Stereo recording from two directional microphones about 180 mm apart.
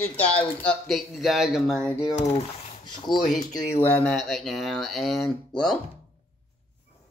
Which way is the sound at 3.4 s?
15° left (ahead or behind).